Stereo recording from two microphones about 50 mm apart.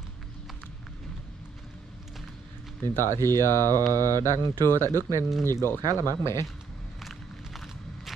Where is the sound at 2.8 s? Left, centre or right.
Left.